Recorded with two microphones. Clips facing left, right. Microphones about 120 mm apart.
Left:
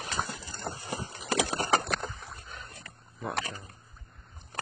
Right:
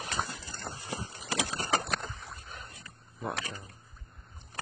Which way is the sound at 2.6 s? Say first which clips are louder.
Left 2 dB; 60° left (ahead or behind).